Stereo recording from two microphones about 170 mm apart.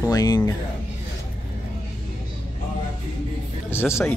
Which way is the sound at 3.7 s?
15° left (ahead or behind).